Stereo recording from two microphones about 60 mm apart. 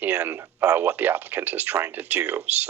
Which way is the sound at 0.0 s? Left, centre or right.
Right.